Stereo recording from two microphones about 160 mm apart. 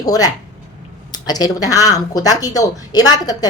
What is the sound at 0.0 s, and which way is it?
Speech, 25° left (ahead or behind).